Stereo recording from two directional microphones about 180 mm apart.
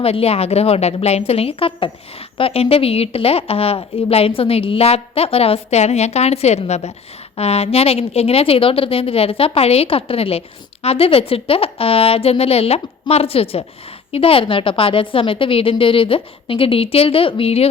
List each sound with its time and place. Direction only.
0.0 s a woman's voice: 35° left (ahead or behind)